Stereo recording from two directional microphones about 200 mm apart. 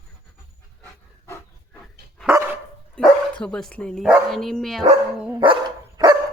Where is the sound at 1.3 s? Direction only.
5° left (ahead or behind).